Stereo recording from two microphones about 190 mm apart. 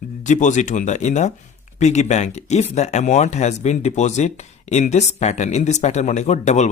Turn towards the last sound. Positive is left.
turn(degrees=35)  # may be behind; listen again after turning